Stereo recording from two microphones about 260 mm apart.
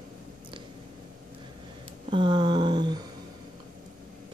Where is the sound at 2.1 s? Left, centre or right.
Centre.